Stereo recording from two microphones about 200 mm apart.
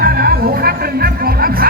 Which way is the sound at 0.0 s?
50° right (ahead or behind).